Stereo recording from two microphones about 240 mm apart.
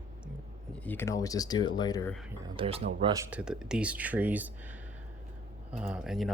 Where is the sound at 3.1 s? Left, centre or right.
Centre.